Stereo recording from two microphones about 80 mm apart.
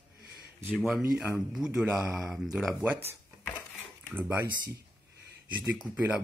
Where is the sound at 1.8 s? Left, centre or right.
Right.